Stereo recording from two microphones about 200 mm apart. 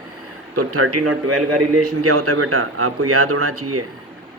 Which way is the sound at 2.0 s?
90° right.